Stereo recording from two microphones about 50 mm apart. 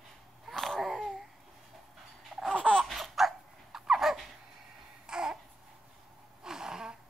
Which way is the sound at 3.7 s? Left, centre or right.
Centre.